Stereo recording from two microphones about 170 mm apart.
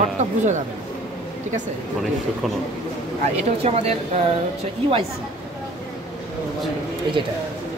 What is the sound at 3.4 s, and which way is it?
Speech, 35° right (ahead or behind).